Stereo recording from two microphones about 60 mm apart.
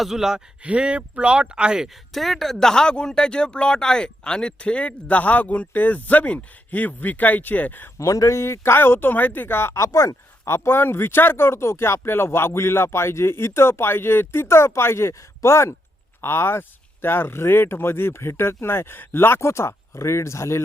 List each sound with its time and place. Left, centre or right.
0.0 s speech: centre
0.6 s speech: centre
2.1 s speech: centre; by 7.9 s left
7.9 s speech: left
9.7 s speech: left
10.5 s speech: left